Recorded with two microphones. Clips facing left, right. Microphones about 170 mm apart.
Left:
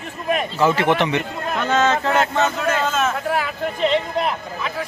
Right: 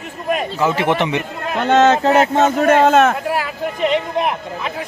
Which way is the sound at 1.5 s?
30° right (ahead or behind).